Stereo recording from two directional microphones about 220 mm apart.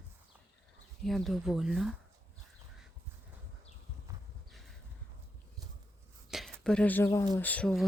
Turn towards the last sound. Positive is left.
turn(degrees=5)  # may be behind; listen again after turning